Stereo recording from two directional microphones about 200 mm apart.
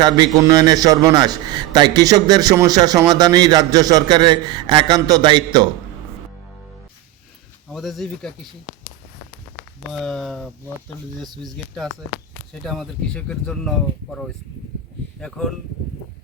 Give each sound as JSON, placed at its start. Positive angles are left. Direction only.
{"t": 0.0, "sound": "a man's voice", "side_deg": -20}
{"t": 7.7, "sound": "speech", "side_deg": 0}
{"t": 9.6, "sound": "speech", "side_deg": 0}